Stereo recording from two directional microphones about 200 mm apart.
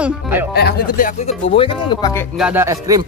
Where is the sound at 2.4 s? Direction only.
10° right (ahead or behind).